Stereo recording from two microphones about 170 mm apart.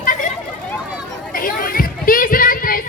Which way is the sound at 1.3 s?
55° left (ahead or behind).